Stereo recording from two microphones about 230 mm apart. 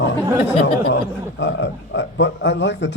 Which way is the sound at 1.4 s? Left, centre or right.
Left.